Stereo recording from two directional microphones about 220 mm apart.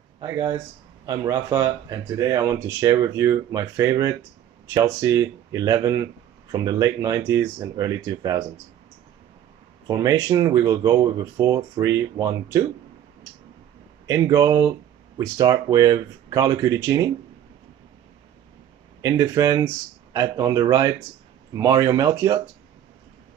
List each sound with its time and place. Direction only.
0.2 s speech: 15° right (ahead or behind)
9.8 s speech: 15° right (ahead or behind)
14.0 s speech: 15° right (ahead or behind)
18.9 s speech: 15° right (ahead or behind)